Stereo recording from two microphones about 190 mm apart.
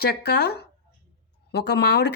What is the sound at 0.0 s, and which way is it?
Speech, 60° left (ahead or behind).